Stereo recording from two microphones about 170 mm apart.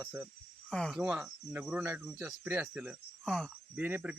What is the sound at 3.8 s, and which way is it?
Speech, 10° right (ahead or behind).